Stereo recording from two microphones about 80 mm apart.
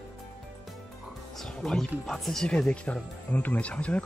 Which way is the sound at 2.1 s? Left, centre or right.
Centre.